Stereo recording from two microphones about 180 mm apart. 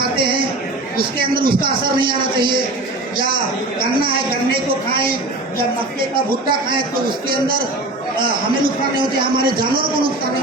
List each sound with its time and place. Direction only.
0.2 s a sound: 25° right (ahead or behind)
1.2 s a man's voice: 55° right (ahead or behind)
8.2 s a man's voice: 55° right (ahead or behind)